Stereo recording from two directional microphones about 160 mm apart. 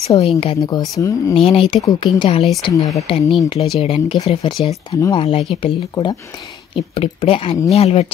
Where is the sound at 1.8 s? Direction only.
25° left (ahead or behind).